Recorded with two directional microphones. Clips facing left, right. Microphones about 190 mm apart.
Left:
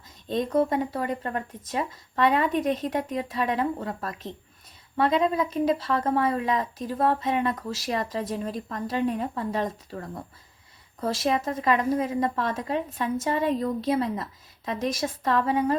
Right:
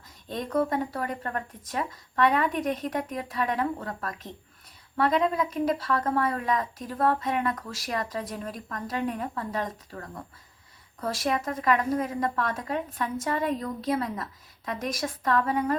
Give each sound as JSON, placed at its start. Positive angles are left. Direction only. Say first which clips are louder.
{"t": 0.3, "sound": "speech", "louder": "left 3 dB", "side_deg": 25}